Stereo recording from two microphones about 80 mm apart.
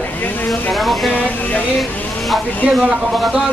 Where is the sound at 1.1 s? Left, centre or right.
Left.